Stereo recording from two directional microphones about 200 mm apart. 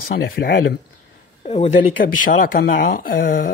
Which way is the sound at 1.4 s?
30° left (ahead or behind).